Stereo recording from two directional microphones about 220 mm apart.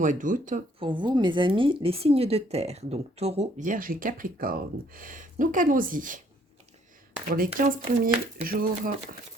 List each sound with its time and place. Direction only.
0.0 s speech: 35° right (ahead or behind)
0.9 s a woman's voice: 20° right (ahead or behind); by 6.2 s 35° right (ahead or behind)
7.3 s speech: 40° right (ahead or behind)